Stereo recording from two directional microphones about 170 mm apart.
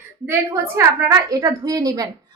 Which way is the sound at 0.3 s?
15° right (ahead or behind).